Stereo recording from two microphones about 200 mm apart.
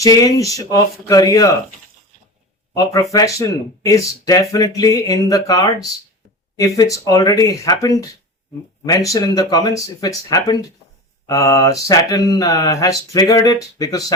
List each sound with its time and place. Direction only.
0.0 s speech: 15° left (ahead or behind)
2.7 s speech: 15° left (ahead or behind)
9.1 s speech: 20° left (ahead or behind)